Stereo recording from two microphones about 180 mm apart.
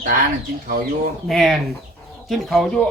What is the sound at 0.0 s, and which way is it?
Speech, 50° right (ahead or behind).